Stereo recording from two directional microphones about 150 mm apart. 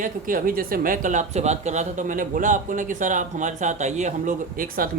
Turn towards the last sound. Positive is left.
turn(degrees=-65)  # may be behind; listen again after turning